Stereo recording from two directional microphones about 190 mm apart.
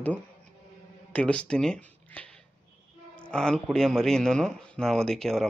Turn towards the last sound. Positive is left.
turn(degrees=0)  # may be behind; listen again after turning